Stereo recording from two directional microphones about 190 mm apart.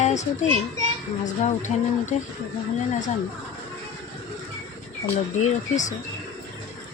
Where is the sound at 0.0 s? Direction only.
40° left (ahead or behind).